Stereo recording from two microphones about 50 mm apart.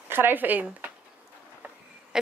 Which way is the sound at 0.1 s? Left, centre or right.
Right.